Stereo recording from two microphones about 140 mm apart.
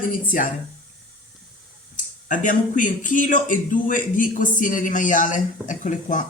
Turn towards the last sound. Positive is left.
turn(degrees=65)  # may be behind; listen again after turning